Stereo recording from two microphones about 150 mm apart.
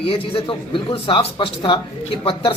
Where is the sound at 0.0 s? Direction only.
35° left (ahead or behind).